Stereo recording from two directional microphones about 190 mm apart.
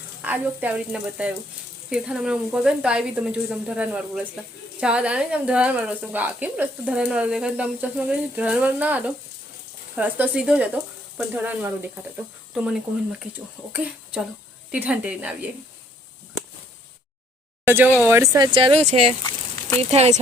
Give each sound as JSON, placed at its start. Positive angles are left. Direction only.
{"t": 0.2, "sound": "speech", "side_deg": -10}
{"t": 17.7, "sound": "speech", "side_deg": -10}